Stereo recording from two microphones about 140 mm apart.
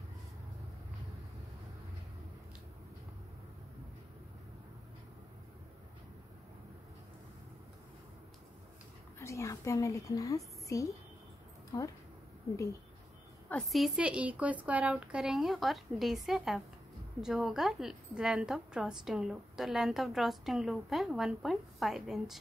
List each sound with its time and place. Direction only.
9.2 s a woman's voice: 20° left (ahead or behind)
13.5 s a woman's voice: 5° left (ahead or behind)